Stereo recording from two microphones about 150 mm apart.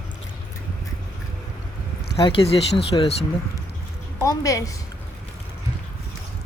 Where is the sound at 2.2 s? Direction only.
40° left (ahead or behind).